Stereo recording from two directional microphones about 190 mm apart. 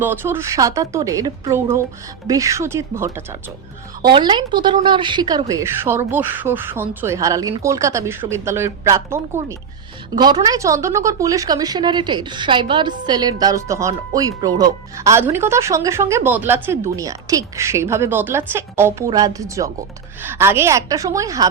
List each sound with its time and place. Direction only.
0.0 s a woman's voice: 10° right (ahead or behind)
4.1 s a woman's voice: 25° right (ahead or behind)